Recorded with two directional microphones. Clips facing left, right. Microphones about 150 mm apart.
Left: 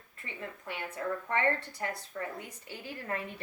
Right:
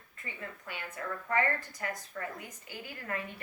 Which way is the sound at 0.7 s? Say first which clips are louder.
Left 5 dB; 30° left (ahead or behind).